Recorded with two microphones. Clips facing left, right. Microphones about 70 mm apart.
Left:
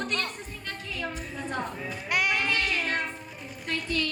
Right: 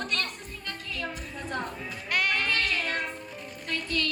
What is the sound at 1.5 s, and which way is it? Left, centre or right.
Sheep, centre.